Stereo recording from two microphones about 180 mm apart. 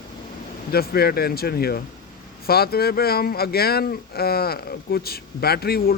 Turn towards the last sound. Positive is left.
turn(degrees=60)  # may be behind; listen again after turning